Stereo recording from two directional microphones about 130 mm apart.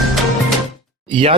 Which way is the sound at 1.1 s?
45° right (ahead or behind).